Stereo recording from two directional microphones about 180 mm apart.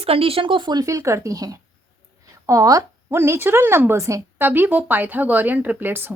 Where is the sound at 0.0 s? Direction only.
30° right (ahead or behind).